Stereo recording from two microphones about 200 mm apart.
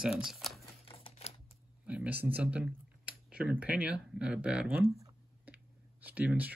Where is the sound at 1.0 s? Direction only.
30° left (ahead or behind).